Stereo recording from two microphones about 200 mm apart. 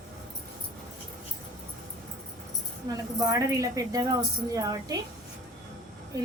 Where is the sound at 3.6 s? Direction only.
15° right (ahead or behind).